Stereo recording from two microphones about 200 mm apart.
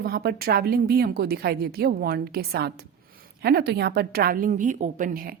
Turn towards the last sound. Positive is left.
turn(degrees=-45)  # may be behind; listen again after turning